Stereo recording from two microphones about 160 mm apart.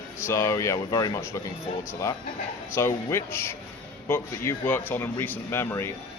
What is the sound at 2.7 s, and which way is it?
Speech, 15° left (ahead or behind).